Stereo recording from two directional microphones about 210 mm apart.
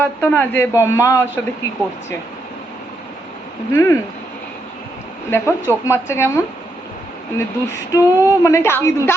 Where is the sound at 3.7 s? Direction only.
15° left (ahead or behind).